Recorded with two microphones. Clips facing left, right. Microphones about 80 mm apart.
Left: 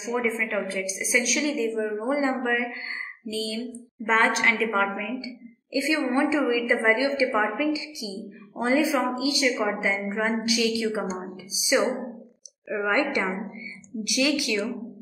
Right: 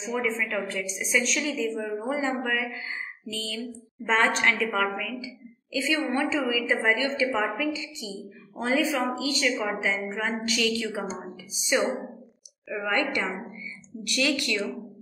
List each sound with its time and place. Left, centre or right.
0.0 s a woman's voice: centre